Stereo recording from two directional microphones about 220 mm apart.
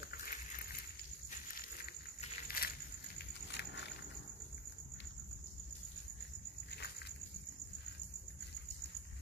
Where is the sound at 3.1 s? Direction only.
50° left (ahead or behind).